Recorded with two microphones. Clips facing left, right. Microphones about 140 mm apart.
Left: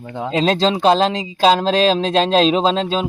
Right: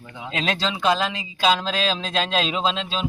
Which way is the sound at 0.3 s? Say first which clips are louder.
Left 9 dB; 35° left (ahead or behind).